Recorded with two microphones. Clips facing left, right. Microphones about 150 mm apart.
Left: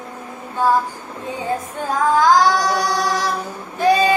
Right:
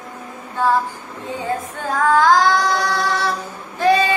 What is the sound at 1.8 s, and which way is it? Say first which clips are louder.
Child singing: even; 10° left (ahead or behind).